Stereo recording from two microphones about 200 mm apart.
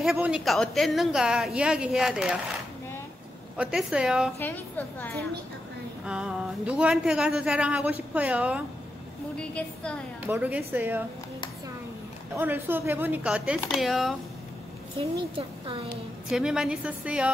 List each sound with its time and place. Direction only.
0.0 s speech: 5° right (ahead or behind)
3.5 s speech: 5° right (ahead or behind)
4.4 s a woman's voice: 10° left (ahead or behind)
6.0 s speech: 5° right (ahead or behind)
9.4 s speech: 5° left (ahead or behind)
10.2 s speech: 5° right (ahead or behind)
12.4 s speech: 10° right (ahead or behind)
15.0 s speech: 25° right (ahead or behind)
16.3 s speech: centre (ahead or behind)